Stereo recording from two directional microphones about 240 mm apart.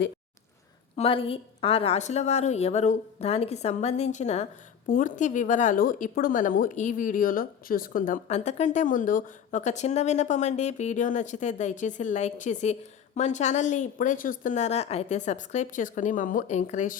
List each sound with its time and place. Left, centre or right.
0.9 s a woman's voice: left